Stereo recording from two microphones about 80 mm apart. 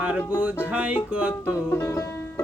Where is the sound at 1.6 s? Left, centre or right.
Left.